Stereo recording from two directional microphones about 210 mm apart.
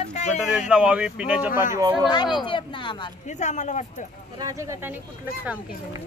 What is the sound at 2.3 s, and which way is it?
Speech, 20° left (ahead or behind).